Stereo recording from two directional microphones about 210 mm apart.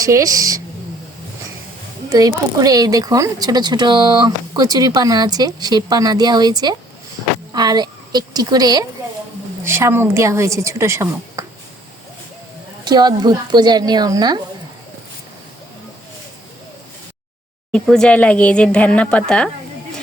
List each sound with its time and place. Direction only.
0.0 s a woman's voice: 15° right (ahead or behind)
2.0 s a woman's voice: 20° right (ahead or behind)
12.8 s speech: 20° right (ahead or behind)
17.7 s speech: centre (ahead or behind)